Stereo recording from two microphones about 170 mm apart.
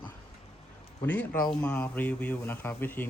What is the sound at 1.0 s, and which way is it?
Speech, 10° left (ahead or behind).